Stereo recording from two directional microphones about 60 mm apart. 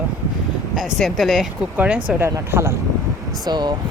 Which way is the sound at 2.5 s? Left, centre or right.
Right.